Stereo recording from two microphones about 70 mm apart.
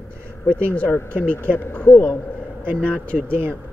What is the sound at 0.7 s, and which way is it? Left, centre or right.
Speech, left.